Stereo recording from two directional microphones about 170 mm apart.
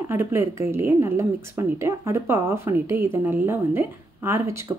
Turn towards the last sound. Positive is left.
turn(degrees=-15)  # may be behind; listen again after turning